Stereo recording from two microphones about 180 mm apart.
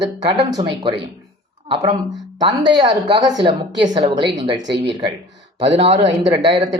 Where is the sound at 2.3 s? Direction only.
25° right (ahead or behind).